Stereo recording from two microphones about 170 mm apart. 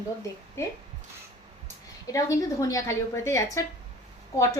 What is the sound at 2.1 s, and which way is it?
A woman's voice, 20° left (ahead or behind).